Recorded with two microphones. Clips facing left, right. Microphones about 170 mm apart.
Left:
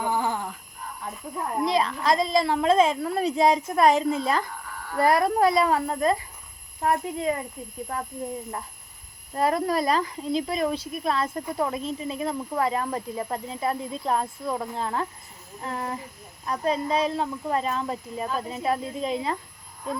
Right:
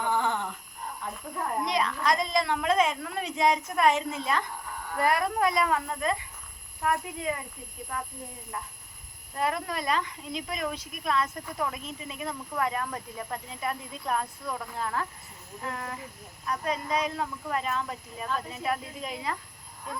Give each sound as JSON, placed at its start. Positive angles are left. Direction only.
{"t": 0.0, "sound": "groan", "side_deg": 10}
{"t": 1.6, "sound": "a woman's voice", "side_deg": 30}
{"t": 9.3, "sound": "a woman's voice", "side_deg": 35}